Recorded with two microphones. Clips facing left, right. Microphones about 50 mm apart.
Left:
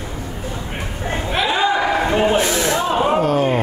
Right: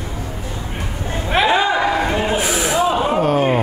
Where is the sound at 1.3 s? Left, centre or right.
Right.